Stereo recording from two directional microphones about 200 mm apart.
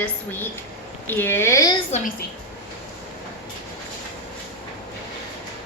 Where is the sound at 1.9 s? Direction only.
40° left (ahead or behind).